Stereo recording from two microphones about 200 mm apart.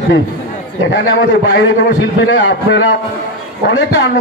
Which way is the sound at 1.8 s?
65° left (ahead or behind).